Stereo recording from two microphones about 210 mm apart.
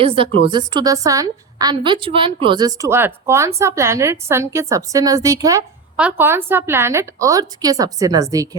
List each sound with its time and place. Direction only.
0.0 s a woman's voice: 25° right (ahead or behind)